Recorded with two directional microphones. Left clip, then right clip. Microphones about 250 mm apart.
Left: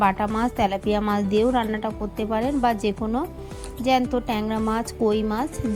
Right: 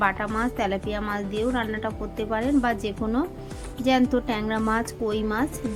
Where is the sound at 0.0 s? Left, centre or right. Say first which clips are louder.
Left 3 dB; left.